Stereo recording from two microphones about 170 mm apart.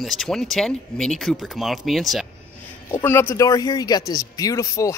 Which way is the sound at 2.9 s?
15° left (ahead or behind).